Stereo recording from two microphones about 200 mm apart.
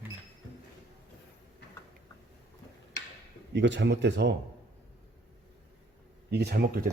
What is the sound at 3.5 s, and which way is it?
Speech, 60° right (ahead or behind).